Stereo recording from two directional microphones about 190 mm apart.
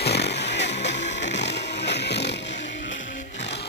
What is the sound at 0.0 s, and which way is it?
Music, 60° left (ahead or behind).